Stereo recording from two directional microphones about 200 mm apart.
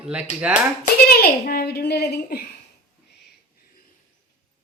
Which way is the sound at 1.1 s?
50° left (ahead or behind).